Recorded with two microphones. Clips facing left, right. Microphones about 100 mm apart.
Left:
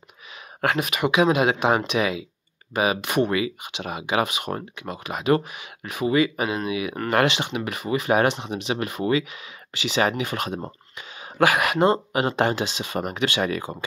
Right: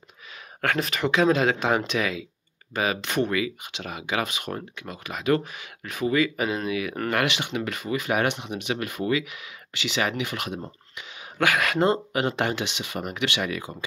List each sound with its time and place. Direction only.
0.7 s speech: 15° left (ahead or behind); by 11.4 s 40° left (ahead or behind)
11.4 s speech: 25° left (ahead or behind); by 13.8 s 45° left (ahead or behind)